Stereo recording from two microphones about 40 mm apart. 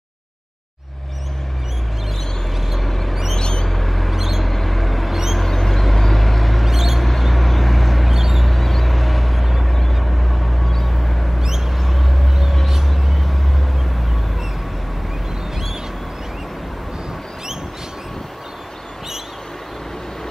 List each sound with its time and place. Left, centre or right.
2.7 s vehicle: centre
3.3 s mouse: left
3.6 s a sound: centre
4.2 s mouse: centre
4.5 s vehicle: centre
5.4 s mouse: centre
6.7 s mouse: centre
7.1 s vehicle: centre
9.7 s vehicle: centre
11.4 s a sound: centre
11.8 s a sound: centre
12.9 s vehicle: centre
15.5 s a sound: centre